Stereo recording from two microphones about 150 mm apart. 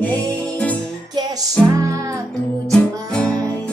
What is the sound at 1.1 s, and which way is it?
Music, 25° right (ahead or behind).